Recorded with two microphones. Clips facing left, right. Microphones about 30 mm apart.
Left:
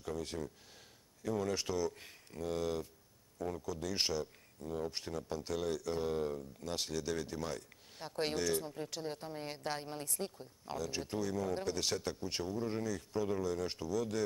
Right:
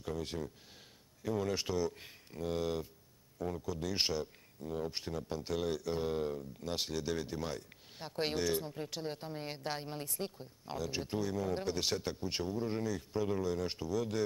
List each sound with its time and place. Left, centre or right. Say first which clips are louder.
0.0 s speech: right 1 dB; centre